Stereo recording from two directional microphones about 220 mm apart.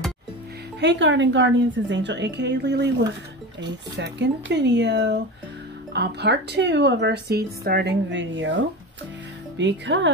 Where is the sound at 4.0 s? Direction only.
50° right (ahead or behind).